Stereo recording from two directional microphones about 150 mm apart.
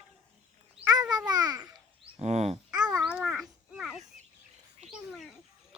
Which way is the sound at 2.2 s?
50° right (ahead or behind).